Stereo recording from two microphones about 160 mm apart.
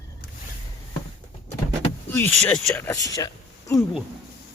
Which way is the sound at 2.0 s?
15° left (ahead or behind).